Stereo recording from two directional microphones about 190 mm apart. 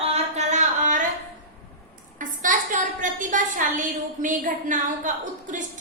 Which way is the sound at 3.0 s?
45° right (ahead or behind).